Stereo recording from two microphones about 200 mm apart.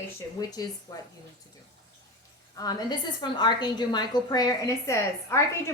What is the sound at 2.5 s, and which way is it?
A woman's voice, 20° left (ahead or behind).